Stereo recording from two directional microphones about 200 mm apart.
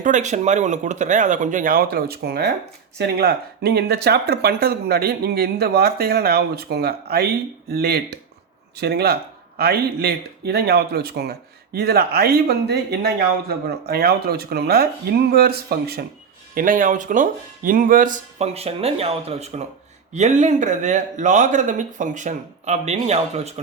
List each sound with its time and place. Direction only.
0.0 s a man's voice: 40° right (ahead or behind)